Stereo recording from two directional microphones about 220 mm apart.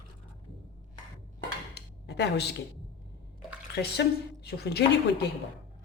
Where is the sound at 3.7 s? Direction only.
50° left (ahead or behind).